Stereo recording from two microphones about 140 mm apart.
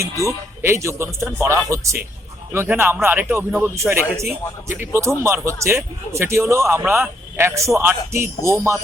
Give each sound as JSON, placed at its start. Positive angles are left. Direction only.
{"t": 0.0, "sound": "a man's voice", "side_deg": -20}